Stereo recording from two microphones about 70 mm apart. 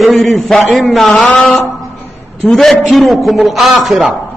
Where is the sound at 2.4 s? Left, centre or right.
Centre.